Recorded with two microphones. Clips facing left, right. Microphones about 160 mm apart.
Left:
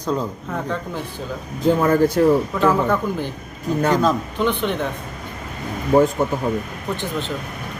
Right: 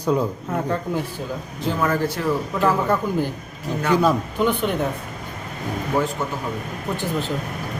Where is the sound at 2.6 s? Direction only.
10° right (ahead or behind).